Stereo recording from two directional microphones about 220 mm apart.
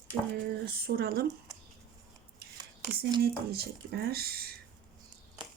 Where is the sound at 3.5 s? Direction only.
45° right (ahead or behind).